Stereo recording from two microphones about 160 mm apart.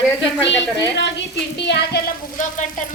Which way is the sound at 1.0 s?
90° left.